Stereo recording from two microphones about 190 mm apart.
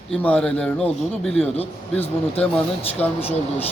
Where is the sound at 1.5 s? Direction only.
30° left (ahead or behind).